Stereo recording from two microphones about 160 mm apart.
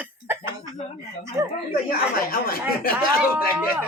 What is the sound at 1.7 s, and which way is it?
Speech, 70° left (ahead or behind).